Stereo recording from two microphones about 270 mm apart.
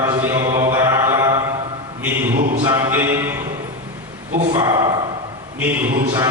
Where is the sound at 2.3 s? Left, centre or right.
Right.